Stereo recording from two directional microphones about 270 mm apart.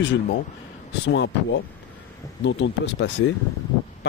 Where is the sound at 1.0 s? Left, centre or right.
Left.